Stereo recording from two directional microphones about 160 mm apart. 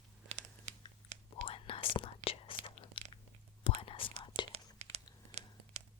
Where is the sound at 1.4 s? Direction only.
35° left (ahead or behind).